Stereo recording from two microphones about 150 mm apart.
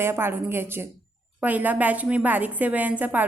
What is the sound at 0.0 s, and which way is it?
A woman's voice, 15° right (ahead or behind).